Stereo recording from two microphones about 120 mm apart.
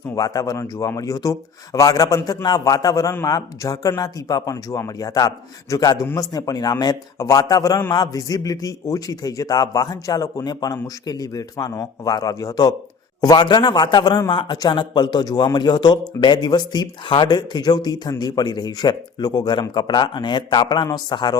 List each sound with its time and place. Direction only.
0.1 s a man's voice: 30° left (ahead or behind)